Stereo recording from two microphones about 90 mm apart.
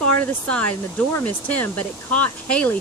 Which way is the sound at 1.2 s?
20° left (ahead or behind).